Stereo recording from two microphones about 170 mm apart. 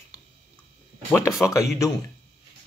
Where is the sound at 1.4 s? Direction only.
5° left (ahead or behind).